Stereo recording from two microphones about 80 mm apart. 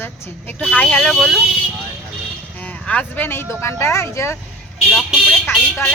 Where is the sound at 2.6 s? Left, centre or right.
Centre; by 4.4 s left.